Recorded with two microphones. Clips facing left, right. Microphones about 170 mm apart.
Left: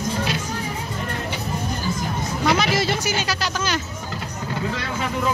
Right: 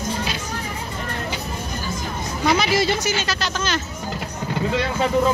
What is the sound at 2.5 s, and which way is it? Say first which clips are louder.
Speech: right 2 dB; centre (ahead or behind).